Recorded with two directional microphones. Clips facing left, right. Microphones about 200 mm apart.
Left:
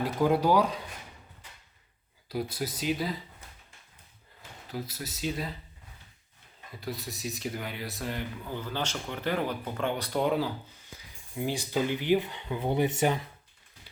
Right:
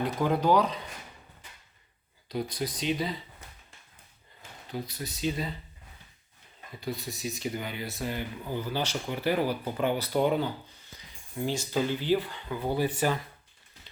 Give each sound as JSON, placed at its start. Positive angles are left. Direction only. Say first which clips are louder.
{"t": 0.0, "sound": "speech", "louder": "left 1 dB", "side_deg": 10}
{"t": 2.3, "sound": "speech", "louder": "right 1 dB", "side_deg": 5}
{"t": 4.7, "sound": "speech", "louder": "right 1 dB", "side_deg": 0}
{"t": 6.7, "sound": "speech", "louder": "right 2 dB", "side_deg": 0}
{"t": 11.3, "sound": "speech", "louder": "even", "side_deg": 15}
{"t": 13.9, "sound": "a sound", "louder": "even", "side_deg": 10}